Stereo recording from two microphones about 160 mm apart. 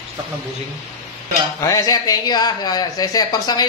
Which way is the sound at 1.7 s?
20° left (ahead or behind).